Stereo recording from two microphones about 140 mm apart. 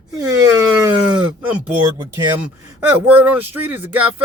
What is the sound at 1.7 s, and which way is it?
Speech, 20° right (ahead or behind).